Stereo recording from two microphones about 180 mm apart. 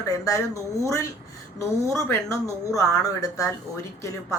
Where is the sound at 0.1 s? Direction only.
20° left (ahead or behind).